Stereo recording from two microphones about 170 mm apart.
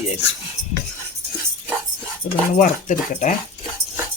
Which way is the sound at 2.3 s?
45° left (ahead or behind).